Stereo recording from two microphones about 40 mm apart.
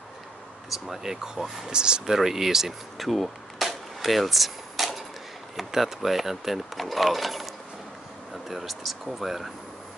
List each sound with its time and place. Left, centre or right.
0.7 s speech: centre
1.7 s speech: right
2.1 s speech: centre